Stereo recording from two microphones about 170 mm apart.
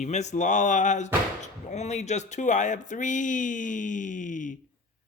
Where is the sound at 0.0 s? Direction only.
40° left (ahead or behind).